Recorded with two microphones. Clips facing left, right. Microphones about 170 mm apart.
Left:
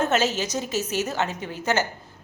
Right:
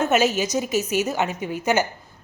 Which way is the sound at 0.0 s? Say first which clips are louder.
Right 3 dB; 10° right (ahead or behind).